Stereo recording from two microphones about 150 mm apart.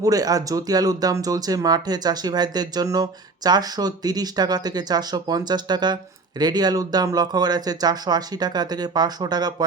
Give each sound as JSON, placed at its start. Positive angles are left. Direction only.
{"t": 0.0, "sound": "speech", "side_deg": -25}